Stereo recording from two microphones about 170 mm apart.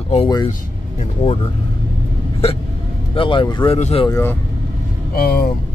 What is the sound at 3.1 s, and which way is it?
Speech, 30° left (ahead or behind).